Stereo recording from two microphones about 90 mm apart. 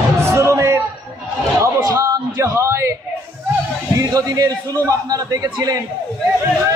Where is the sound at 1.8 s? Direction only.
40° right (ahead or behind).